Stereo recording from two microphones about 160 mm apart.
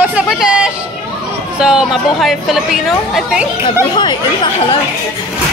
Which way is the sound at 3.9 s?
30° left (ahead or behind).